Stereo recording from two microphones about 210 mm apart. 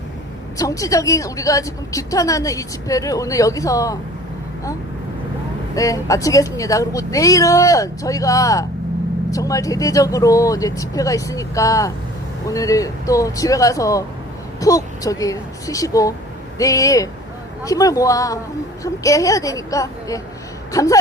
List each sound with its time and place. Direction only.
0.5 s a woman's voice: 15° left (ahead or behind)
5.7 s a woman's voice: 15° left (ahead or behind)